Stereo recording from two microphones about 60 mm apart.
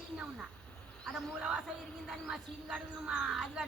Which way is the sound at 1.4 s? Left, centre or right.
Centre.